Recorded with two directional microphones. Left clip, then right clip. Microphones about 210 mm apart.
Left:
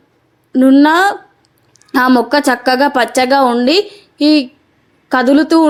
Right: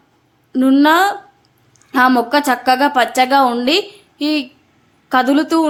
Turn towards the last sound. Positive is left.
turn(degrees=20)  # may be behind; listen again after turning